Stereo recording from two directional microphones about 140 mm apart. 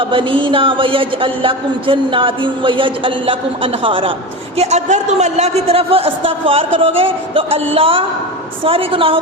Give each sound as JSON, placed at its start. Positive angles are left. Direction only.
{"t": 0.0, "sound": "speech", "side_deg": -40}
{"t": 4.5, "sound": "a man's voice", "side_deg": -50}